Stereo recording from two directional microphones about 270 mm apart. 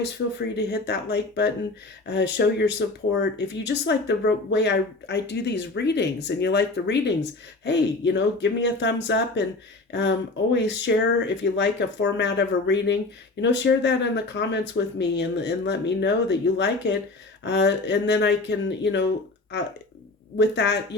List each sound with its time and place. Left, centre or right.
0.0 s speech: left
10.5 s speech: left
20.4 s speech: left